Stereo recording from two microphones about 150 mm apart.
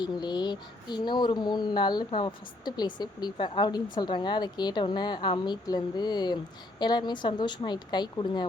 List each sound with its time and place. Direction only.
0.0 s a woman's voice: 30° left (ahead or behind)